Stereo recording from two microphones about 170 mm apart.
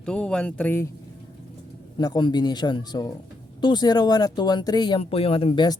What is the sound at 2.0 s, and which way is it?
Speech, 25° left (ahead or behind).